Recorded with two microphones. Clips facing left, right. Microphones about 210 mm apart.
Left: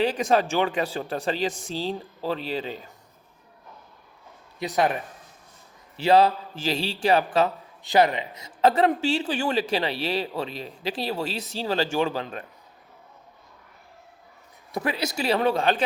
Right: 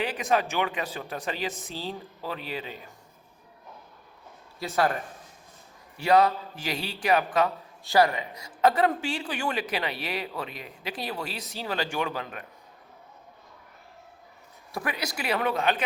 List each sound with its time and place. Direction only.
0.2 s speech: 30° left (ahead or behind)
4.6 s speech: 15° left (ahead or behind)
6.0 s a man's voice: 25° left (ahead or behind)
14.7 s a man's voice: 25° left (ahead or behind)